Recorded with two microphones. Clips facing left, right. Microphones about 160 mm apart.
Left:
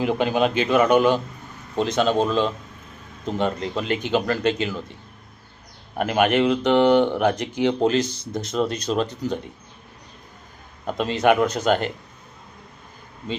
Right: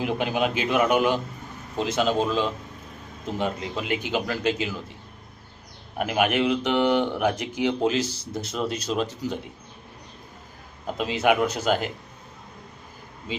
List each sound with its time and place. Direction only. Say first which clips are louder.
0.0 s a man's voice: left 4 dB; 5° right (ahead or behind)
6.0 s a man's voice: left 4 dB; 5° right (ahead or behind)
10.8 s speech: left 3 dB; 5° right (ahead or behind)